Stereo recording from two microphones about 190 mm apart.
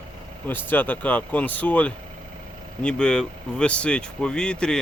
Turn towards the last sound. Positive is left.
turn(degrees=5)  # may be behind; listen again after turning